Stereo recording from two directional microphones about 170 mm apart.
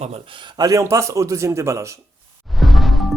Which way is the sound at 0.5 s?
20° right (ahead or behind).